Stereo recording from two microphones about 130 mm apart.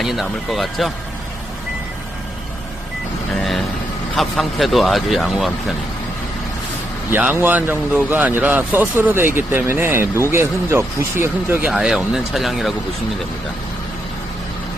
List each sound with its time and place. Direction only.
0.0 s speech: centre (ahead or behind)
4.1 s speech: centre (ahead or behind)
7.1 s speech: 15° right (ahead or behind)
11.7 s speech: 5° right (ahead or behind)